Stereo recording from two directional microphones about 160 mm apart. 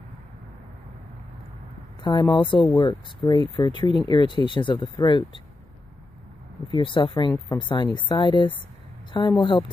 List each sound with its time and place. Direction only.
2.0 s speech: 25° left (ahead or behind)
6.7 s speech: 30° left (ahead or behind)